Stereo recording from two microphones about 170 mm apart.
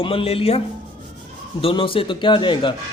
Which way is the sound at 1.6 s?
30° left (ahead or behind).